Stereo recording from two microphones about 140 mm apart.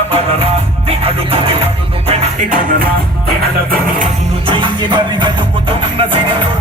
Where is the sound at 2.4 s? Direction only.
90° right.